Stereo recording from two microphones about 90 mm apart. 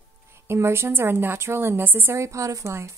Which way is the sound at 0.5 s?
30° right (ahead or behind).